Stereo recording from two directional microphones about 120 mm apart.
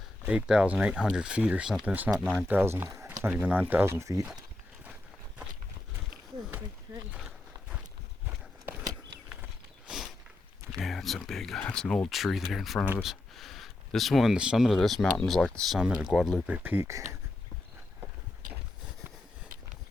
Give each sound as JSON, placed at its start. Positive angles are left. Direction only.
{"t": 0.3, "sound": "speech", "side_deg": -5}
{"t": 3.4, "sound": "speech", "side_deg": -10}
{"t": 7.2, "sound": "walk", "side_deg": 0}
{"t": 10.8, "sound": "speech", "side_deg": 0}
{"t": 16.5, "sound": "speech", "side_deg": -15}